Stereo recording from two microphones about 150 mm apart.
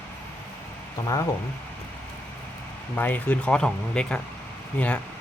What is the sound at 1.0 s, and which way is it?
Speech, 25° left (ahead or behind).